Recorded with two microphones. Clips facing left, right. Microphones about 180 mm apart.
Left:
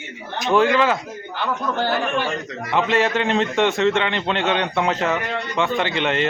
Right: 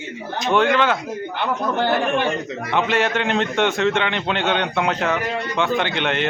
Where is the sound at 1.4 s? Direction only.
20° right (ahead or behind).